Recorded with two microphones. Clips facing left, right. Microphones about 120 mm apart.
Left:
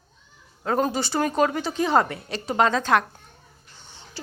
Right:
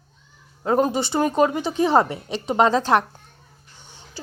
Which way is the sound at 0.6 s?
20° right (ahead or behind).